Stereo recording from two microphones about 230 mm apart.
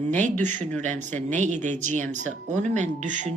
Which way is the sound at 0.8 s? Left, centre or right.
Right.